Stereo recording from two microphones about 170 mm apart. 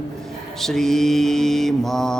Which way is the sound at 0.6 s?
Centre (ahead or behind).